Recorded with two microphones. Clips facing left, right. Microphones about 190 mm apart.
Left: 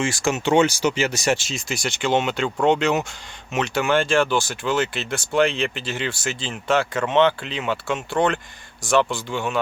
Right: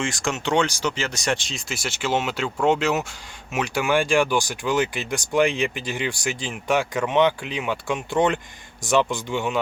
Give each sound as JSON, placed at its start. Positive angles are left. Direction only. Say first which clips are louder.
{"t": 0.0, "sound": "speech", "louder": "left 4 dB", "side_deg": 5}